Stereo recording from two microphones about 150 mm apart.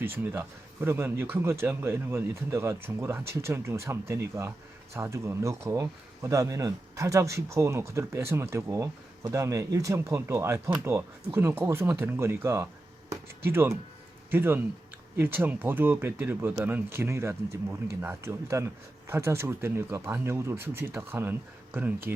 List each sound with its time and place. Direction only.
0.0 s speech: 15° right (ahead or behind)